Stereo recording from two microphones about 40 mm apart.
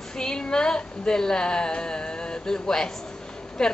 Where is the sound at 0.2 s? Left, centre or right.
Centre.